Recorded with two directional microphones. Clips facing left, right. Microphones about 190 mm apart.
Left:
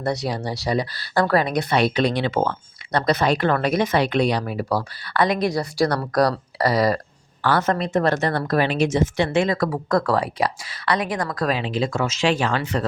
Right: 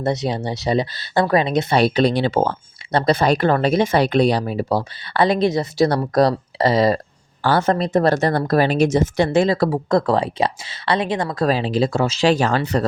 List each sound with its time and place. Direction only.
0.0 s speech: 20° right (ahead or behind); by 12.8 s 40° right (ahead or behind)